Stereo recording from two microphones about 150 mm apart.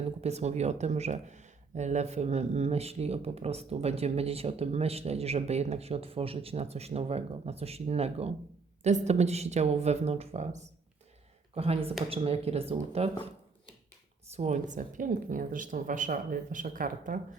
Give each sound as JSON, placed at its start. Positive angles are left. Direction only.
{"t": 0.2, "sound": "speech", "side_deg": -45}
{"t": 14.3, "sound": "speech", "side_deg": -50}